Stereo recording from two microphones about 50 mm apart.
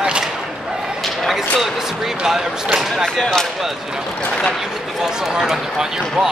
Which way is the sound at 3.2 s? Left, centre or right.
Centre.